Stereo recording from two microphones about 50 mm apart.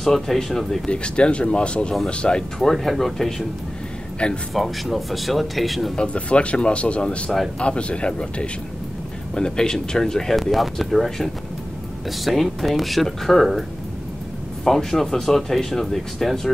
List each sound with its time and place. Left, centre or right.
0.0 s speech: centre
0.8 s speech: left
2.6 s speech: centre
4.2 s speech: centre
4.6 s speech: centre
5.9 s speech: left; by 11.2 s centre
12.3 s speech: centre